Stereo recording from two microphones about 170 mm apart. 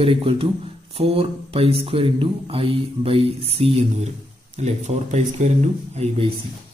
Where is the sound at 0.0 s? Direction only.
30° right (ahead or behind).